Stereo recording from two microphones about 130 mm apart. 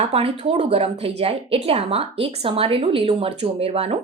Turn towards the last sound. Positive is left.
turn(degrees=-50)  # may be behind; listen again after turning